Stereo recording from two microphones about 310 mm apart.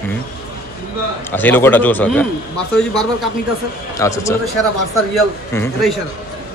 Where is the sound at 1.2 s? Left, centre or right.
Centre.